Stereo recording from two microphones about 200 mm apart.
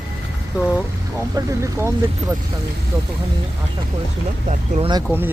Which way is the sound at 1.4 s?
15° right (ahead or behind).